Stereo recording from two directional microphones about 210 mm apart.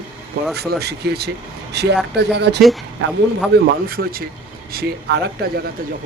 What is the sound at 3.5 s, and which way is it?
Speech, 50° right (ahead or behind).